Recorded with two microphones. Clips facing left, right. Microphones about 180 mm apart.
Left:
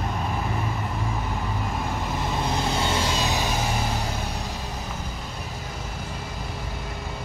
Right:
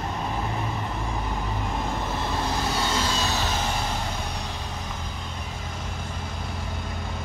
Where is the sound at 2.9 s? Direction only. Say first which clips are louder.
Left 1 dB; 20° left (ahead or behind).